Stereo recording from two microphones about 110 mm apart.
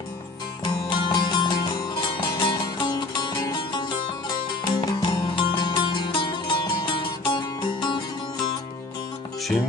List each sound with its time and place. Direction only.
0.6 s music: 45° left (ahead or behind)